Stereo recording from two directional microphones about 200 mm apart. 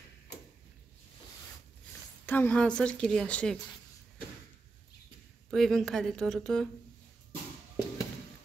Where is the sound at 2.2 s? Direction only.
10° left (ahead or behind).